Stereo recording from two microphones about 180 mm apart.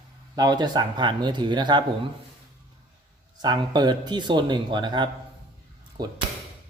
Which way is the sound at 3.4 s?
25° right (ahead or behind).